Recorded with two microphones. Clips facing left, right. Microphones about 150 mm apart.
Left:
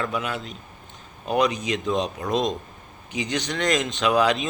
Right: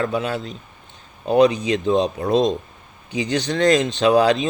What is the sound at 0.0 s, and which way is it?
Speech, 30° right (ahead or behind).